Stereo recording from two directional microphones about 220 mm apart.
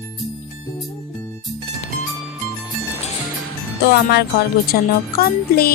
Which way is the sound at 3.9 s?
45° left (ahead or behind).